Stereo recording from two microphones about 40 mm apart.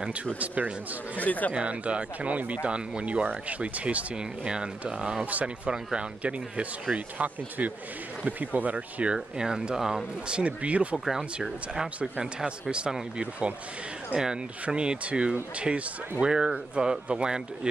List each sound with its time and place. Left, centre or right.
0.4 s speech: right
1.1 s speech: left
1.5 s speech: right
5.2 s speech: right
5.7 s speech: right
7.2 s speech: right
9.4 s speech: centre
10.2 s speech: right
11.4 s speech: centre
13.2 s speech: right
16.2 s speech: centre